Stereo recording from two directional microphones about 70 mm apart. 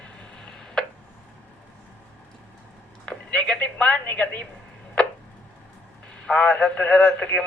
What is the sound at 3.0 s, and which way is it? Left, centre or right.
A woman's voice, centre.